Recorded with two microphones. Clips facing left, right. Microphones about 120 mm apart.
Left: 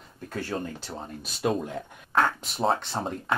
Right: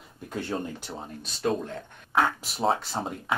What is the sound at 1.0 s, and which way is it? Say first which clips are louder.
Speech: left 1 dB; 5° left (ahead or behind).